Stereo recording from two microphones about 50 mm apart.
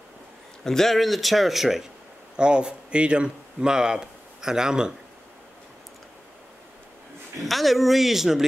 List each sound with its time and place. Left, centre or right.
0.7 s a man's voice: centre
2.3 s speech: centre
7.4 s a man's voice: centre